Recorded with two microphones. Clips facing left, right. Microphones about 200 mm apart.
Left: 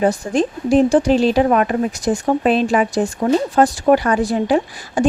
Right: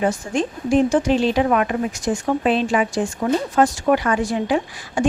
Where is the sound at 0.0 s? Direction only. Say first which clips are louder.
Left 4 dB; 35° left (ahead or behind).